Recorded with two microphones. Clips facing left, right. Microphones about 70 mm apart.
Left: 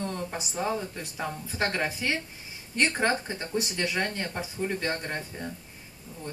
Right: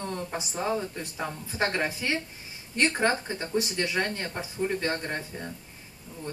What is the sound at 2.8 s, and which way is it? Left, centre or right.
Speech, right.